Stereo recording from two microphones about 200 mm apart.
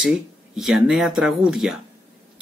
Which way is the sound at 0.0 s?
Centre (ahead or behind).